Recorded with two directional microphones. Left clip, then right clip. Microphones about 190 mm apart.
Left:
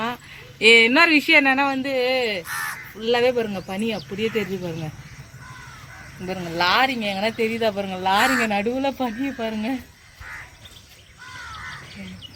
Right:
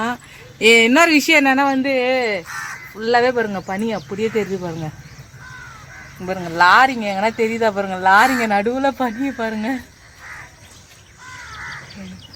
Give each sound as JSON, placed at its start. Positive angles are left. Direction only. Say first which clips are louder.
{"t": 0.6, "sound": "speech", "louder": "right 2 dB", "side_deg": -60}
{"t": 3.7, "sound": "speech", "louder": "right 4 dB", "side_deg": -15}
{"t": 6.2, "sound": "speech", "louder": "right 8 dB", "side_deg": -20}